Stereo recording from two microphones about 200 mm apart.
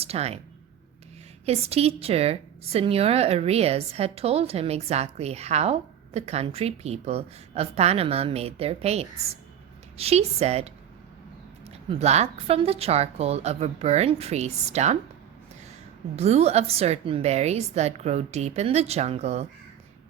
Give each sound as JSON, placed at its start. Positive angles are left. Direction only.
{"t": 0.0, "sound": "speech", "side_deg": -30}
{"t": 1.5, "sound": "a woman's voice", "side_deg": -30}
{"t": 11.7, "sound": "a woman's voice", "side_deg": -30}
{"t": 16.1, "sound": "a woman's voice", "side_deg": -30}